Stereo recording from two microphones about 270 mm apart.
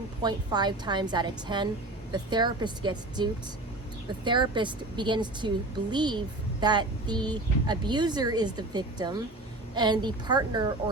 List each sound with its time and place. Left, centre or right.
0.2 s speech: centre